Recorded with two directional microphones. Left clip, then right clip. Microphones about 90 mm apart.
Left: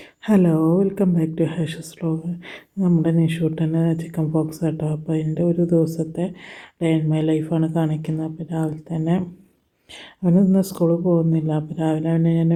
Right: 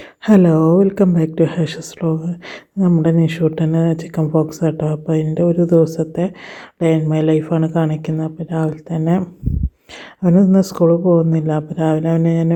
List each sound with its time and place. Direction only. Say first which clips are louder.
0.3 s speech: right 6 dB; 45° right (ahead or behind)
10.2 s speech: right 5 dB; 35° right (ahead or behind)